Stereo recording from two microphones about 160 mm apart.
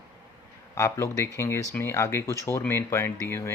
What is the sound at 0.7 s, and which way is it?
Speech, 20° left (ahead or behind).